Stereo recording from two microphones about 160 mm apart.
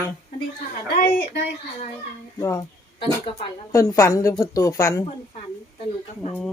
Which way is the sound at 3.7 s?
20° left (ahead or behind).